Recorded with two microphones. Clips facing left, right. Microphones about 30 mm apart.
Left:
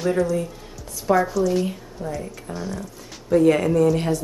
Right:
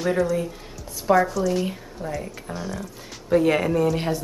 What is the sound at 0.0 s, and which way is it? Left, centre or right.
Speech, centre.